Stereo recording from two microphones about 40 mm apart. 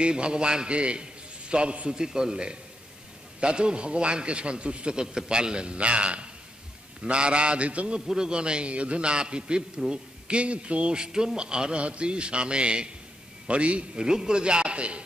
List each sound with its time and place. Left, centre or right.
0.0 s a man's voice: right
2.0 s a man's voice: centre; by 7.9 s right
7.9 s a man's voice: centre
13.9 s a man's voice: centre